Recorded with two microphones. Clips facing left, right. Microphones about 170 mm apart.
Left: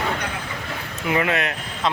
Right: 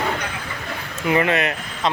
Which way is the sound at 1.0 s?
Centre (ahead or behind).